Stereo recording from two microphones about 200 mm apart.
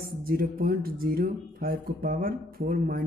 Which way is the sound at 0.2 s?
50° right (ahead or behind).